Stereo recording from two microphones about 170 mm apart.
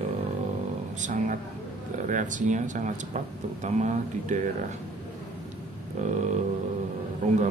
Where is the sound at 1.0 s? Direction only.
50° right (ahead or behind).